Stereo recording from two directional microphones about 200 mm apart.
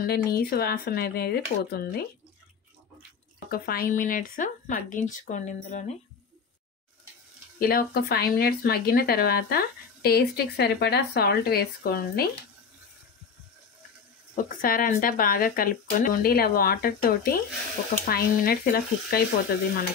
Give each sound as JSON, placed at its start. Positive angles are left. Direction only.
{"t": 0.0, "sound": "speech", "side_deg": 50}
{"t": 3.4, "sound": "speech", "side_deg": 50}
{"t": 7.6, "sound": "speech", "side_deg": 50}
{"t": 14.3, "sound": "speech", "side_deg": 45}